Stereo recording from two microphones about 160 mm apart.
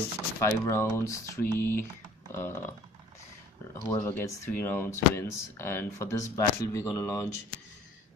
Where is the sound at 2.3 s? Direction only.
15° left (ahead or behind).